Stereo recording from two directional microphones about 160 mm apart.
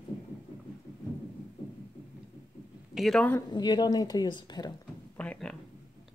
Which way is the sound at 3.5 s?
25° left (ahead or behind).